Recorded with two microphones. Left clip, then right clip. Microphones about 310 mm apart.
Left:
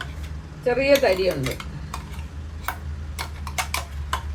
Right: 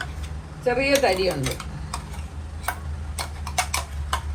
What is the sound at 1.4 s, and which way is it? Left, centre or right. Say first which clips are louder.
Typing: even; centre.